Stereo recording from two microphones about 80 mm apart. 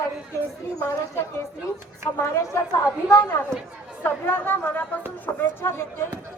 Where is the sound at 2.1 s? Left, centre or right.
Left.